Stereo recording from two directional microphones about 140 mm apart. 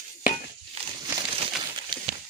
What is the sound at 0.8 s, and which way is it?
Crumpling, 45° right (ahead or behind).